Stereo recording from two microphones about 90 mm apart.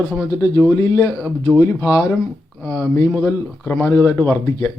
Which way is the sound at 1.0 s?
20° left (ahead or behind).